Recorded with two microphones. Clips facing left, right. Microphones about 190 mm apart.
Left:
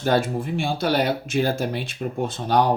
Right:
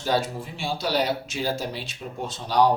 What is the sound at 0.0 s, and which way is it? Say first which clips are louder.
Speech: left 4 dB; 55° left (ahead or behind).